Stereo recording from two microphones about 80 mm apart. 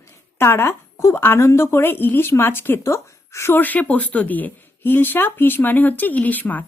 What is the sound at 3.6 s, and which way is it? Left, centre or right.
Speech, centre.